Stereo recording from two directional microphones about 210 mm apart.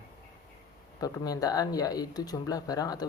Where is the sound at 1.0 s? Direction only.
15° left (ahead or behind).